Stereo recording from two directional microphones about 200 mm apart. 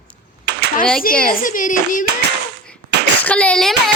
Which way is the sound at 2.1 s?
55° right (ahead or behind).